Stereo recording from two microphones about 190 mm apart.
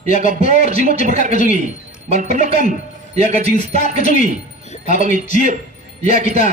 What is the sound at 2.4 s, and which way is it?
Speech, 40° left (ahead or behind).